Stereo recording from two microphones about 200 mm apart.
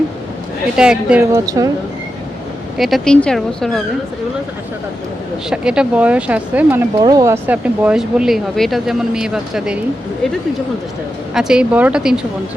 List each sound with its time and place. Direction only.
0.8 s speech: 5° right (ahead or behind)
1.5 s speech: 15° right (ahead or behind)
2.7 s speech: centre (ahead or behind)
5.5 s speech: 5° right (ahead or behind)
11.3 s speech: 5° right (ahead or behind)